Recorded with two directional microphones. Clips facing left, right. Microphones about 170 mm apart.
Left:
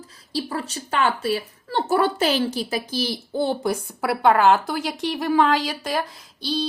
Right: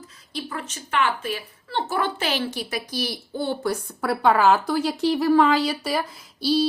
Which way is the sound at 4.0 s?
Centre (ahead or behind).